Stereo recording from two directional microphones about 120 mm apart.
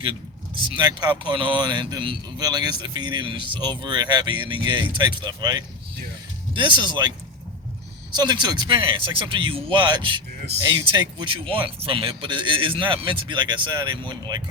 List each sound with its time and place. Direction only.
0.7 s speech: 35° right (ahead or behind)
8.1 s a man's voice: 35° right (ahead or behind)